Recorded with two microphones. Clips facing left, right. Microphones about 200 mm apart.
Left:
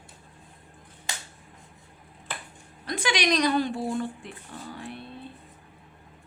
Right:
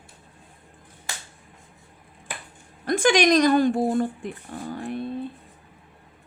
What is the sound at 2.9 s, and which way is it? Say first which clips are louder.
Speech: right 8 dB; 50° right (ahead or behind).